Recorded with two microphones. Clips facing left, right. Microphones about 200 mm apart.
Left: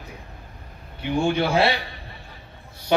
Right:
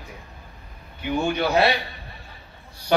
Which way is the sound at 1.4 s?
30° left (ahead or behind).